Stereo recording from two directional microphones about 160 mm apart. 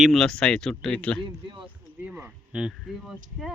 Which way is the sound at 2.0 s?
10° right (ahead or behind).